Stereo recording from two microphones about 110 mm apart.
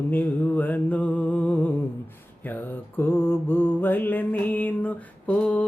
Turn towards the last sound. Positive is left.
turn(degrees=10)  # may be behind; listen again after turning